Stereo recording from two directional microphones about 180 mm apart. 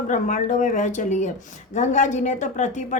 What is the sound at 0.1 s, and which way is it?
A man's voice, 45° left (ahead or behind).